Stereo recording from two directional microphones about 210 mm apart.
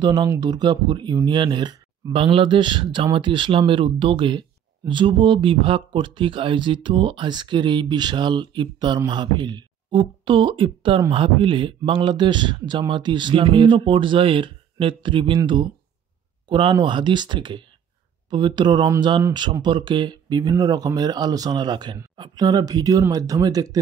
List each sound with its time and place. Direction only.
0.0 s speech: 20° right (ahead or behind)